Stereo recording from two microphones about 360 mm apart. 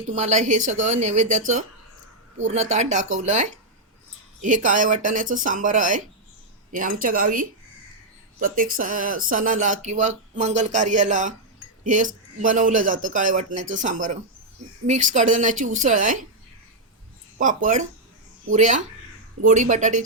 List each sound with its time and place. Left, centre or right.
0.1 s speech: centre
2.6 s speech: centre
17.3 s speech: right